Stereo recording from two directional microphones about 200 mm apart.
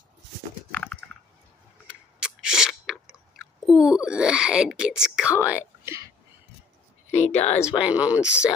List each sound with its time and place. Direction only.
1.9 s chewing: 5° right (ahead or behind)
7.1 s a sound: 35° left (ahead or behind)
7.8 s speech: 5° right (ahead or behind)